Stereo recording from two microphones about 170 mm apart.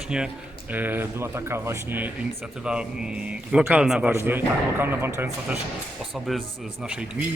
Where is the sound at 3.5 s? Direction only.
5° right (ahead or behind).